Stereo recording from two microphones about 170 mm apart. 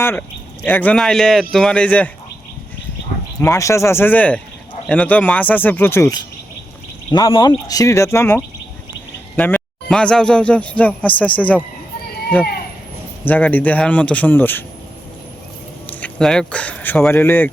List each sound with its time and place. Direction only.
0.0 s speech: 10° left (ahead or behind)
3.4 s a man's voice: 20° left (ahead or behind)
13.2 s speech: 10° left (ahead or behind)
15.9 s speech: 10° left (ahead or behind)